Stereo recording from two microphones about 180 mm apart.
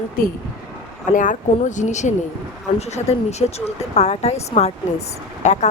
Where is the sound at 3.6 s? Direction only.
35° left (ahead or behind).